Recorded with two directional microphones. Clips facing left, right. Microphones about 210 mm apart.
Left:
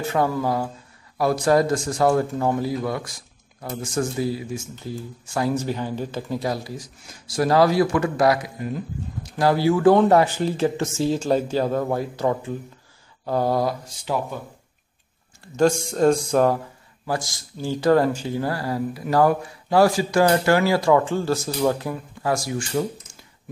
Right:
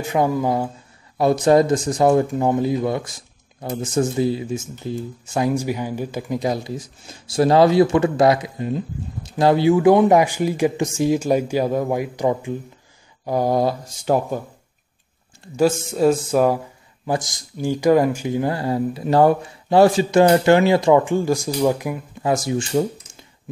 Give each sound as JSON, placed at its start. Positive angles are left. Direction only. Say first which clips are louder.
{"t": 0.0, "sound": "speech", "louder": "right 3 dB", "side_deg": -15}
{"t": 13.2, "sound": "a sound", "louder": "right 2 dB", "side_deg": -15}
{"t": 14.0, "sound": "speech", "louder": "right 6 dB", "side_deg": -45}
{"t": 15.5, "sound": "speech", "louder": "right 1 dB", "side_deg": -5}
{"t": 17.0, "sound": "speech", "louder": "right 3 dB", "side_deg": -20}